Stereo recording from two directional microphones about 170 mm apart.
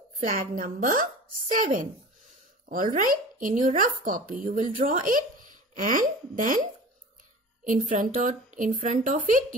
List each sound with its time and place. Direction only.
0.2 s a child's voice: 55° right (ahead or behind)